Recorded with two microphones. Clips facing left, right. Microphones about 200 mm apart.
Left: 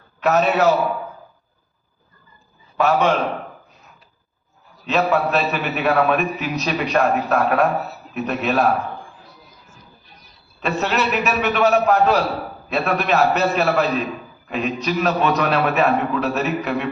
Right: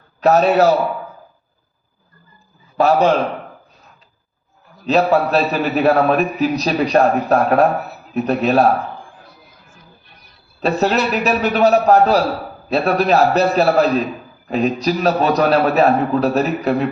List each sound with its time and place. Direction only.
0.2 s a man's voice: 35° right (ahead or behind)
2.7 s a man's voice: 35° right (ahead or behind)
4.9 s a man's voice: 35° right (ahead or behind)
9.6 s music: 55° right (ahead or behind)
10.6 s a man's voice: 35° right (ahead or behind)